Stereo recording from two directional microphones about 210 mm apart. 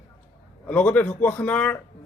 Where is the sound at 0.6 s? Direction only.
5° left (ahead or behind).